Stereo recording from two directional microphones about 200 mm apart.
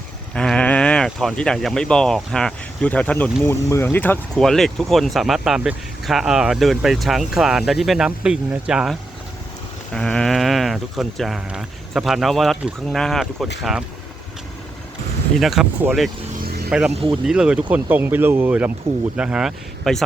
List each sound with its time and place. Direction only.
0.3 s speech: 5° left (ahead or behind)
15.4 s speech: centre (ahead or behind)
16.9 s speech: 25° right (ahead or behind)
17.2 s speech: 5° right (ahead or behind)